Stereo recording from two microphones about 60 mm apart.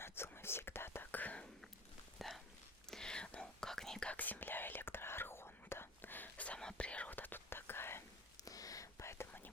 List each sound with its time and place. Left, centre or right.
0.0 s whispering: left
1.2 s whispering: left
2.1 s a sound: centre
2.9 s whispering: centre
4.1 s whispering: left
8.4 s whispering: left